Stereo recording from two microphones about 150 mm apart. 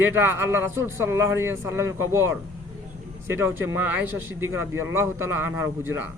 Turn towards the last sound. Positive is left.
turn(degrees=-15)  # may be behind; listen again after turning